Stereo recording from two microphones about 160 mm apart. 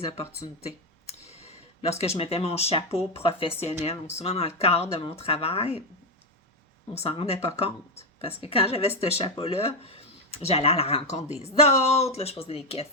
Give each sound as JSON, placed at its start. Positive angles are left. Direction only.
{"t": 1.0, "sound": "speech", "side_deg": 40}
{"t": 6.9, "sound": "speech", "side_deg": 40}
{"t": 9.2, "sound": "speech", "side_deg": 25}
{"t": 9.6, "sound": "speech", "side_deg": 40}